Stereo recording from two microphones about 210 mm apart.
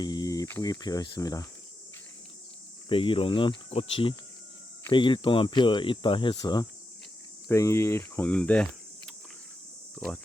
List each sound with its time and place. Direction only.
0.0 s speech: 20° left (ahead or behind)
2.9 s speech: 25° left (ahead or behind); by 8.6 s 5° left (ahead or behind)